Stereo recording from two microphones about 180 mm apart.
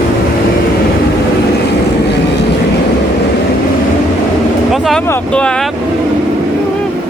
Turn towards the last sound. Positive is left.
turn(degrees=5)  # may be behind; listen again after turning